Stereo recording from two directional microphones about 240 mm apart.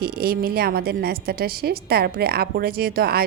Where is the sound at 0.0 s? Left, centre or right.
Right.